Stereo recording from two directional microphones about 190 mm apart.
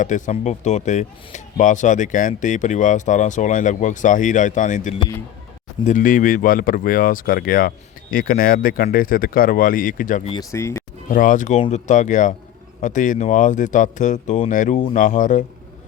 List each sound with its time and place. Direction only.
0.0 s speech: 40° left (ahead or behind)
10.5 s speech: 15° left (ahead or behind)
11.1 s speech: 45° left (ahead or behind)